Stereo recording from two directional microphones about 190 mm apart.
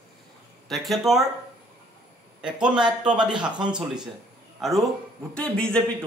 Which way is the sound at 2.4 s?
5° right (ahead or behind).